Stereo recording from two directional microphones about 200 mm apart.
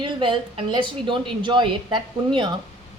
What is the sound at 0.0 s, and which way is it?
A woman's voice, 25° right (ahead or behind).